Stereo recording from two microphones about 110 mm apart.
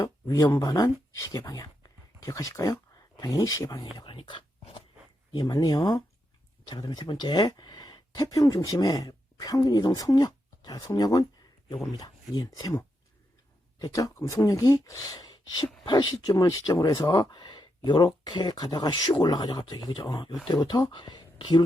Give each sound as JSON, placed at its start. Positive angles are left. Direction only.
{"t": 0.0, "sound": "speech", "side_deg": 30}
{"t": 5.3, "sound": "speech", "side_deg": 35}
{"t": 15.8, "sound": "speech", "side_deg": 50}
{"t": 16.3, "sound": "speech", "side_deg": 30}